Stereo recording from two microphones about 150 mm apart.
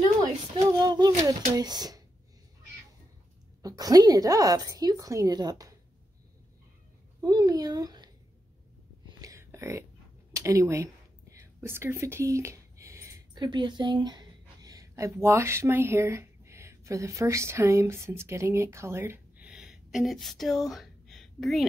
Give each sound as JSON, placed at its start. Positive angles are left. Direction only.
{"t": 0.7, "sound": "a woman's voice", "side_deg": -30}
{"t": 3.6, "sound": "a woman's voice", "side_deg": -25}
{"t": 7.2, "sound": "speech", "side_deg": -25}
{"t": 9.0, "sound": "a sound", "side_deg": -20}
{"t": 10.3, "sound": "speech", "side_deg": -20}